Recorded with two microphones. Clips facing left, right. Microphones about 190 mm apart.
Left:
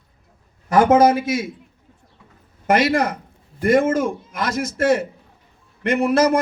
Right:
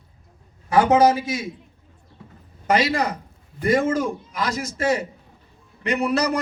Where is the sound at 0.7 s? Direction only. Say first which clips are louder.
Left 2 dB; 50° left (ahead or behind).